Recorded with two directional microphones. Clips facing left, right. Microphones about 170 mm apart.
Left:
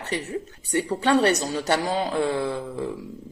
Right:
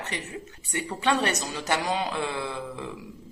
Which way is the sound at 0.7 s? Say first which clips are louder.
Left 5 dB; 35° left (ahead or behind).